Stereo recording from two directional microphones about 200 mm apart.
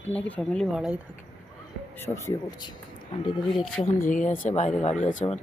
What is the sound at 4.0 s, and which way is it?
Speech, 40° left (ahead or behind).